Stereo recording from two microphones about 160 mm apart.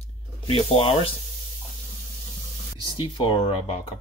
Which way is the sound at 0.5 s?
35° left (ahead or behind).